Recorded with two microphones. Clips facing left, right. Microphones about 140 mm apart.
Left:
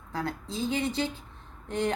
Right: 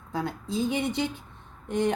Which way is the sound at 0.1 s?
20° right (ahead or behind).